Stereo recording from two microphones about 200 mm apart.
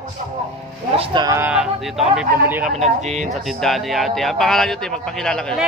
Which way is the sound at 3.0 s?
35° right (ahead or behind).